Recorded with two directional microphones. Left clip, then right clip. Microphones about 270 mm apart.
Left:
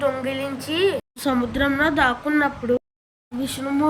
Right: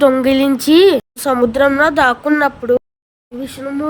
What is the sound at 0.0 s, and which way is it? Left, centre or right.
A woman's voice, right.